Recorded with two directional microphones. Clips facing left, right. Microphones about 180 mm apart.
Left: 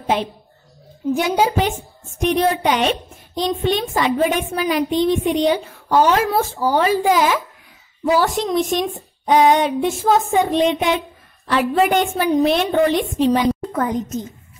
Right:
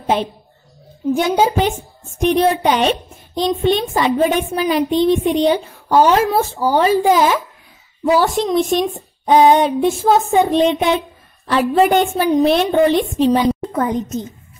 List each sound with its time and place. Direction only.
0.0 s speech: 35° right (ahead or behind)
1.3 s a woman's voice: 25° right (ahead or behind)